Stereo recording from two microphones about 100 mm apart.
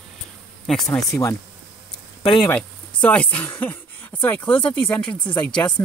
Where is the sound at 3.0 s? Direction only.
15° left (ahead or behind).